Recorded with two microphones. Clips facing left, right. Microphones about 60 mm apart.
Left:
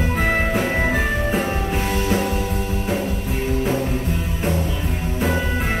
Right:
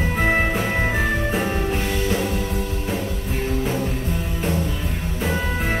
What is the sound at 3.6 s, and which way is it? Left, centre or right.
Music, left.